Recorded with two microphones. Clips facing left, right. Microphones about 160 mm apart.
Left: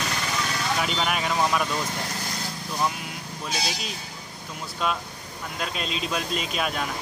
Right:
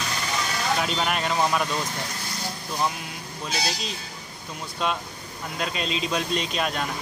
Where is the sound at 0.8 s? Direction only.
Centre (ahead or behind).